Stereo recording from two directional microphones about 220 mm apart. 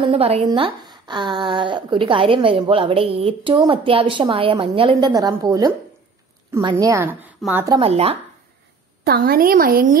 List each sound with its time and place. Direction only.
0.0 s a woman's voice: 25° right (ahead or behind)
9.0 s a woman's voice: 45° right (ahead or behind)